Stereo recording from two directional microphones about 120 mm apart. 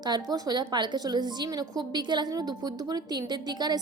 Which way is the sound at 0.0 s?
35° right (ahead or behind).